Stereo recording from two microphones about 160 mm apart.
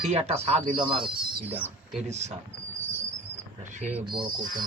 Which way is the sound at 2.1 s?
45° right (ahead or behind).